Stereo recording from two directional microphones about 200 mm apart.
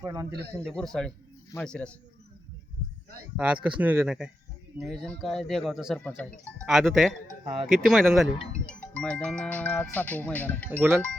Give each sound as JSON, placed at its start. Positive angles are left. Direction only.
{"t": 0.0, "sound": "speech", "side_deg": -15}
{"t": 0.6, "sound": "a man's voice", "side_deg": 0}
{"t": 3.3, "sound": "a man's voice", "side_deg": -5}
{"t": 10.7, "sound": "speech", "side_deg": -10}